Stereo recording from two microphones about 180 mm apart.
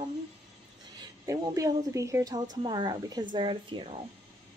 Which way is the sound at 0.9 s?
20° right (ahead or behind).